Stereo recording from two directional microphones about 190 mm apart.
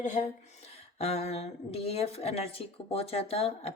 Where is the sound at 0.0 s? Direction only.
40° left (ahead or behind).